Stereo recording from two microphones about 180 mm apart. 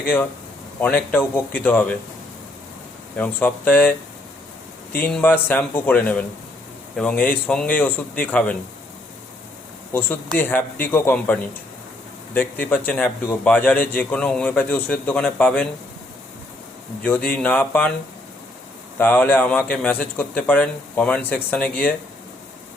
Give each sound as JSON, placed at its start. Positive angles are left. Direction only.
{"t": 0.8, "sound": "a man's voice", "side_deg": 10}
{"t": 3.2, "sound": "a man's voice", "side_deg": 10}
{"t": 5.0, "sound": "a man's voice", "side_deg": 10}
{"t": 10.3, "sound": "a man's voice", "side_deg": 10}
{"t": 17.0, "sound": "a man's voice", "side_deg": 10}
{"t": 18.9, "sound": "a man's voice", "side_deg": 10}